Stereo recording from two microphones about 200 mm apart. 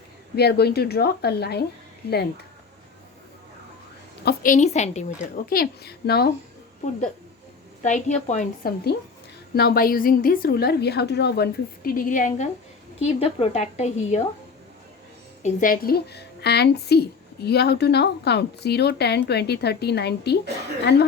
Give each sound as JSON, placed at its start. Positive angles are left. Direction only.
{"t": 0.3, "sound": "a woman's voice", "side_deg": 55}
{"t": 4.3, "sound": "a woman's voice", "side_deg": 40}
{"t": 7.8, "sound": "a woman's voice", "side_deg": 35}
{"t": 13.0, "sound": "a woman's voice", "side_deg": 30}
{"t": 15.4, "sound": "a woman's voice", "side_deg": 45}